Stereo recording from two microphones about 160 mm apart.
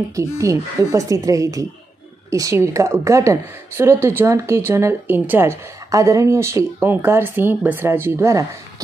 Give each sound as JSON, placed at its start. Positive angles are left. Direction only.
{"t": 0.1, "sound": "a woman's voice", "side_deg": -20}